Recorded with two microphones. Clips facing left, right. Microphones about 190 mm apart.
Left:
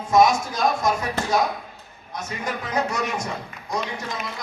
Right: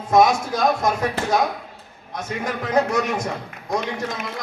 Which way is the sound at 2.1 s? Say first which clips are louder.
Right 3 dB; 60° right (ahead or behind).